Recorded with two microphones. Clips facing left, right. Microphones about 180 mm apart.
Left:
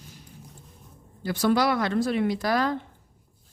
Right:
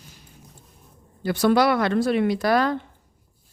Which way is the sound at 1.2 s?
65° right (ahead or behind).